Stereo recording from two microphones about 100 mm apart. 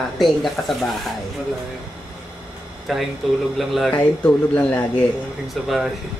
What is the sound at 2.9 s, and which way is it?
Speech, centre (ahead or behind).